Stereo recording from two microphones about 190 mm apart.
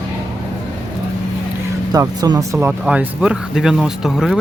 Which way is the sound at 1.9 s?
20° right (ahead or behind).